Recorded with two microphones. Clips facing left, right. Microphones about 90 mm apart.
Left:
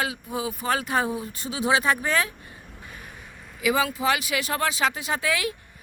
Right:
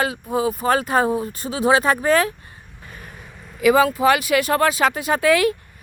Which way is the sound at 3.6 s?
50° right (ahead or behind).